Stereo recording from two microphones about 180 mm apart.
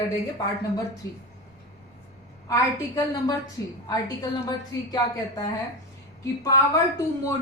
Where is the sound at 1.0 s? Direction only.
15° left (ahead or behind).